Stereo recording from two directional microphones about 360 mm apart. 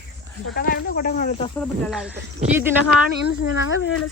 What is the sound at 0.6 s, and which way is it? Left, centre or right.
Speech, left.